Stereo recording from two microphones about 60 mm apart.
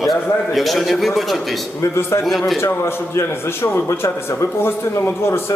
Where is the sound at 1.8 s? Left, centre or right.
Left.